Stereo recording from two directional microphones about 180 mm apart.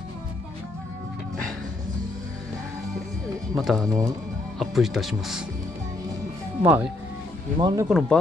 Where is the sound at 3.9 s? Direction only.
20° right (ahead or behind).